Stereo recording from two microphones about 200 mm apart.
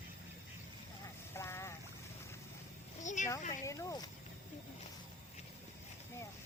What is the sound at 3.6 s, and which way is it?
Speech, 15° left (ahead or behind).